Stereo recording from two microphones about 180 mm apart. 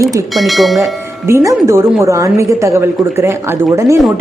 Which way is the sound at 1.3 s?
15° right (ahead or behind).